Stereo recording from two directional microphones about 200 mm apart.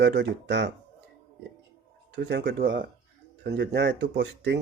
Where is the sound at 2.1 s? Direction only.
60° right (ahead or behind).